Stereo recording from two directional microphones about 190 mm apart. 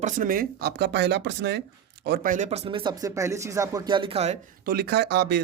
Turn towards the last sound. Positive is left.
turn(degrees=-60)  # may be behind; listen again after turning